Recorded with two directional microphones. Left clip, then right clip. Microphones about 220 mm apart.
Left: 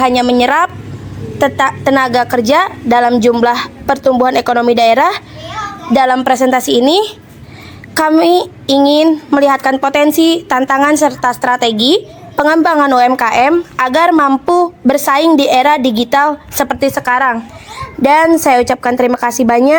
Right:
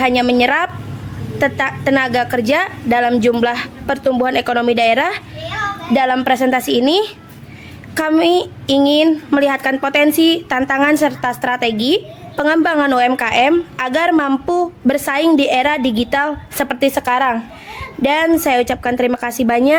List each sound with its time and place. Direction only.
0.0 s a woman's voice: 15° left (ahead or behind)
18.0 s a woman's voice: 15° left (ahead or behind)